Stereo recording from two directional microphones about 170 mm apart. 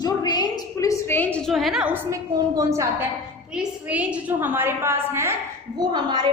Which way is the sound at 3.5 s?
5° right (ahead or behind).